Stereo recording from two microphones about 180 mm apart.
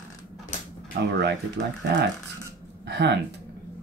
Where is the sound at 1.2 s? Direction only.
70° right (ahead or behind).